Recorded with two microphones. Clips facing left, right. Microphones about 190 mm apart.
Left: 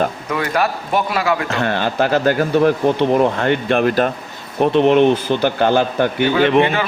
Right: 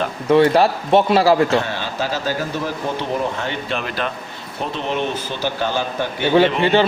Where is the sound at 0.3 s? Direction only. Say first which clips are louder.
Right 6 dB; 30° right (ahead or behind).